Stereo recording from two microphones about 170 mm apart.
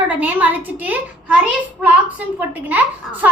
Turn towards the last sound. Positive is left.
turn(degrees=-10)  # may be behind; listen again after turning